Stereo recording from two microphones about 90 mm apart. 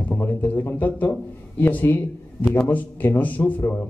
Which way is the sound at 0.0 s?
20° left (ahead or behind).